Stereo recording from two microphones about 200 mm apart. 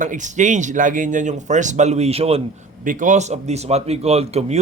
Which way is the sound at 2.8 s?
40° right (ahead or behind).